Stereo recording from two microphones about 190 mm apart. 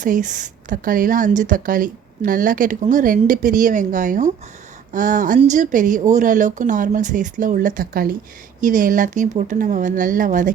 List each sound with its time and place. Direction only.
0.0 s a woman's voice: 40° right (ahead or behind)